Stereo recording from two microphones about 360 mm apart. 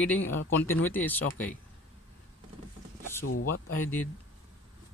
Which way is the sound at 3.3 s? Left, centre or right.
Left.